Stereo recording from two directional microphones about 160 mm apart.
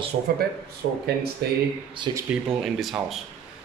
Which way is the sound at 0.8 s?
75° right (ahead or behind).